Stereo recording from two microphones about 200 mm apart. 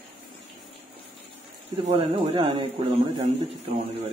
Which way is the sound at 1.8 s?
30° right (ahead or behind).